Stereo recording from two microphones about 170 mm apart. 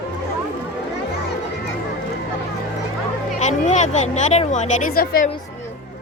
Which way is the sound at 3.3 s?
45° left (ahead or behind).